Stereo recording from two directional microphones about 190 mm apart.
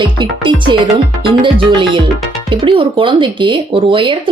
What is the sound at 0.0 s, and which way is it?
Speech, 25° right (ahead or behind).